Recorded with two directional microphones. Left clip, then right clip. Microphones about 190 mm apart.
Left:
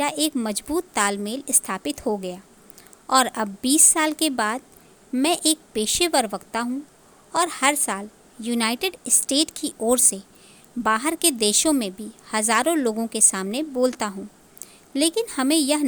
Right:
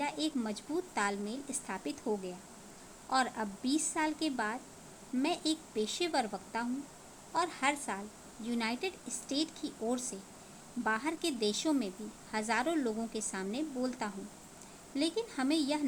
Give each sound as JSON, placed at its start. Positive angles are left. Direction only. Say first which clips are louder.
{"t": 0.0, "sound": "a woman's voice", "louder": "left 12 dB", "side_deg": 60}